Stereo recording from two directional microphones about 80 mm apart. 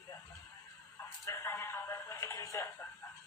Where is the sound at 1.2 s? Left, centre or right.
Left.